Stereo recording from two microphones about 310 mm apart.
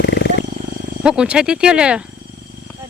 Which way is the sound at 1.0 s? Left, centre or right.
Centre.